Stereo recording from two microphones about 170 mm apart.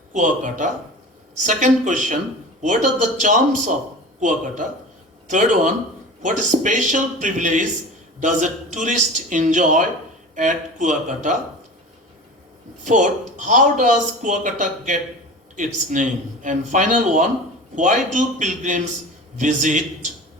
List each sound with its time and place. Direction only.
0.1 s speech: 50° right (ahead or behind)
3.2 s speech: 45° right (ahead or behind)
12.8 s speech: 50° right (ahead or behind)